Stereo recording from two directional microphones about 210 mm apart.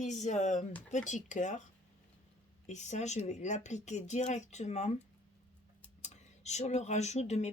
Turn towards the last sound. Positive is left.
turn(degrees=30)  # may be behind; listen again after turning